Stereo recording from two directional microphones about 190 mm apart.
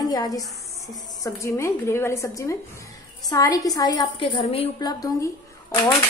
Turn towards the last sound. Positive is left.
turn(degrees=20)  # may be behind; listen again after turning